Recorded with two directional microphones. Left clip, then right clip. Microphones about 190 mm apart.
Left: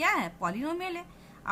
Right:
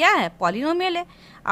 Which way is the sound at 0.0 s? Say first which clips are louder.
Right 10 dB; 45° right (ahead or behind).